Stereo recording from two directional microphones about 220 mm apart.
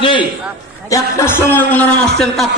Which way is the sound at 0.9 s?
10° left (ahead or behind).